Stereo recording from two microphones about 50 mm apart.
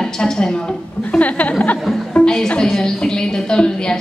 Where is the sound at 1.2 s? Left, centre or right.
Left.